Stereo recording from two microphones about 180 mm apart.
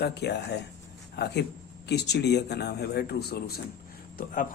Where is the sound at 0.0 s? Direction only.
70° left (ahead or behind).